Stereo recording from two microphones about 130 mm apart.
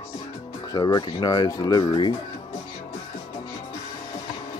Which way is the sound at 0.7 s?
30° left (ahead or behind).